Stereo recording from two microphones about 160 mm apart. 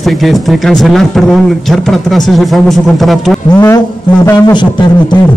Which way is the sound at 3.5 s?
15° left (ahead or behind).